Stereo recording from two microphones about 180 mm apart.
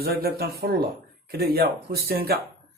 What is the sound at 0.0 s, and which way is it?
Speech, 60° right (ahead or behind).